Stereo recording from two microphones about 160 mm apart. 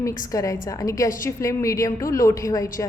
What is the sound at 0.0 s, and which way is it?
A woman's voice, 20° left (ahead or behind).